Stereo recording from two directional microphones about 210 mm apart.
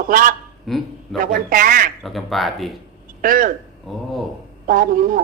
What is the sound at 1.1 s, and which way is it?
Speech, 40° right (ahead or behind).